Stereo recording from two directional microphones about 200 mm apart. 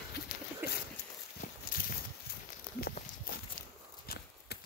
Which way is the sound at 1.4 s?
45° left (ahead or behind).